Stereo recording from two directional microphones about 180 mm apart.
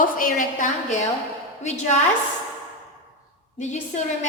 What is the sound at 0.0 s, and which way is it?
A woman's voice, 50° left (ahead or behind).